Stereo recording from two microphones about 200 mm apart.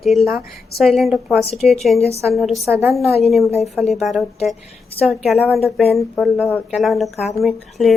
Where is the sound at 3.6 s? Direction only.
Centre (ahead or behind).